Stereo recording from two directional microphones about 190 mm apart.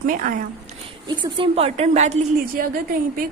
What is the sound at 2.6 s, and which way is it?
Speech, 45° right (ahead or behind).